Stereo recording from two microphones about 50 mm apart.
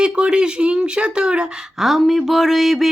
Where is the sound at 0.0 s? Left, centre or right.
Centre.